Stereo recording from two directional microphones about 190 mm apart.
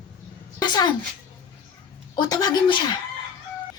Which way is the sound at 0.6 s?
20° left (ahead or behind).